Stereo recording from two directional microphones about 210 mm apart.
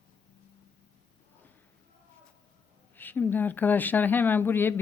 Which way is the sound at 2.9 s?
10° left (ahead or behind).